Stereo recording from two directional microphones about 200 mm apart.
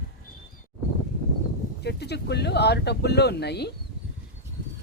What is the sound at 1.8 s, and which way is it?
Speech, 55° left (ahead or behind).